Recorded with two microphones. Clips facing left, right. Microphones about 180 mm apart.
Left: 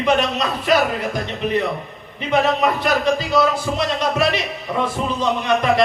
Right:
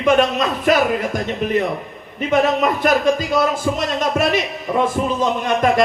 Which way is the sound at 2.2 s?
50° right (ahead or behind).